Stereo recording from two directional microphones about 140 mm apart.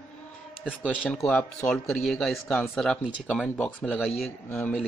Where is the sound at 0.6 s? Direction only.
5° left (ahead or behind).